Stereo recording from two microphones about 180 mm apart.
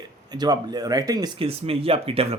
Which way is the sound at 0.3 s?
20° right (ahead or behind).